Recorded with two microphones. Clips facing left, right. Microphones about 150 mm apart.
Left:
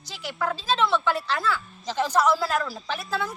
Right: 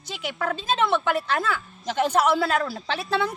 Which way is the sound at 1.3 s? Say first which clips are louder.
Right 1 dB; 55° right (ahead or behind).